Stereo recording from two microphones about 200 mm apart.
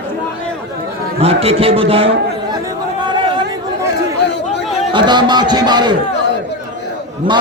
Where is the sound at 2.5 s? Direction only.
20° right (ahead or behind).